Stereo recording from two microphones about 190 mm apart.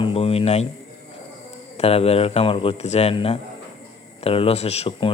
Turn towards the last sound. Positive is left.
turn(degrees=30)  # may be behind; listen again after turning